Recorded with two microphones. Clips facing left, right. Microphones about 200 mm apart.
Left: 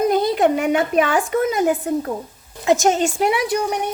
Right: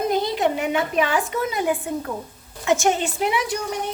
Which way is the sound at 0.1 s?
50° left (ahead or behind).